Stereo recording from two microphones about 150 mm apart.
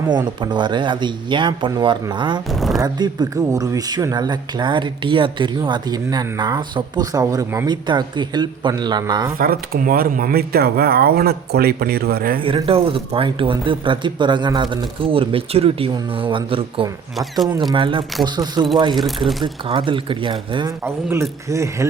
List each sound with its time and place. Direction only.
0.3 s speech: 30° right (ahead or behind)
2.5 s a sound: centre (ahead or behind)
2.8 s speech: 25° right (ahead or behind)
9.4 s speech: 75° right (ahead or behind)
12.4 s speech: 35° right (ahead or behind)
18.9 s speech: centre (ahead or behind)
19.6 s speech: 35° right (ahead or behind)
20.8 s speech: 20° right (ahead or behind)